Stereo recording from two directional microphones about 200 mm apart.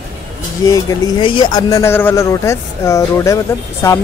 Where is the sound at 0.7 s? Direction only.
15° left (ahead or behind).